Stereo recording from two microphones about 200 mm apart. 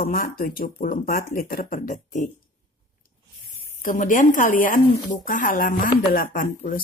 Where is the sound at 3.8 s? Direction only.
40° left (ahead or behind).